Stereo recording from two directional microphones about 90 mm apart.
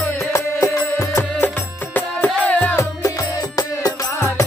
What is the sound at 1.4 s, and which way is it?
Music, 20° left (ahead or behind).